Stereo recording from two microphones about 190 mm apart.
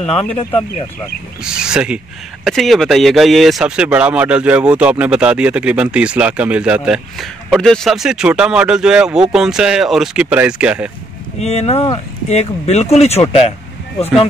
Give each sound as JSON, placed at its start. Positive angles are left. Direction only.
{"t": 0.0, "sound": "speech", "side_deg": 30}
{"t": 1.4, "sound": "speech", "side_deg": -5}
{"t": 11.4, "sound": "speech", "side_deg": 35}